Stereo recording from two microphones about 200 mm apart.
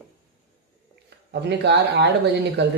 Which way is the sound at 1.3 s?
60° right (ahead or behind).